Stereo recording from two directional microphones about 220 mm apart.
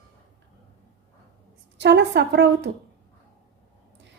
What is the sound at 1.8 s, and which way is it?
Speech, 50° right (ahead or behind).